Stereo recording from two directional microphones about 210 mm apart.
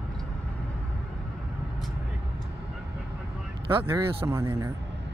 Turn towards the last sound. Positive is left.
turn(degrees=-10)  # may be behind; listen again after turning